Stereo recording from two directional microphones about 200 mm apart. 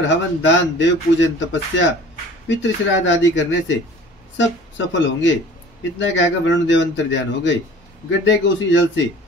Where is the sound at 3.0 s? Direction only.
65° left (ahead or behind).